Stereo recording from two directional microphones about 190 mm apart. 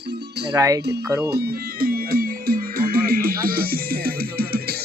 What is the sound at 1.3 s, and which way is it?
Music, 55° right (ahead or behind).